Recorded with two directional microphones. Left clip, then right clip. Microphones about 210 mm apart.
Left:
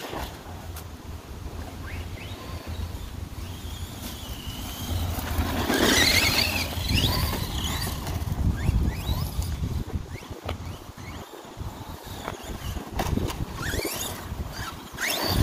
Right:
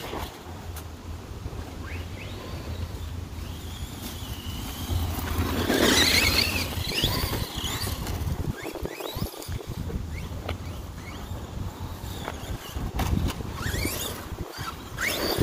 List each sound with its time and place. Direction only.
5.2 s vehicle: 15° left (ahead or behind)
5.8 s vehicle: centre (ahead or behind)
12.9 s vehicle: 5° right (ahead or behind)
13.6 s vehicle: 10° left (ahead or behind)
14.6 s vehicle: 30° left (ahead or behind)